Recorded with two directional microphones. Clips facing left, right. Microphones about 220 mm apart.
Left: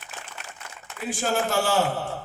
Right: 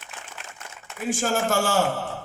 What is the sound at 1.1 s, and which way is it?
Speech, 45° right (ahead or behind).